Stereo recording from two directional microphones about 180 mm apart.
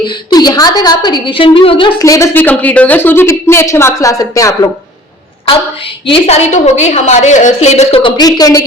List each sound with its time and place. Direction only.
0.1 s a woman's voice: 25° left (ahead or behind)
2.0 s a woman's voice: 15° left (ahead or behind)
6.1 s a woman's voice: 35° left (ahead or behind); by 8.6 s 20° left (ahead or behind)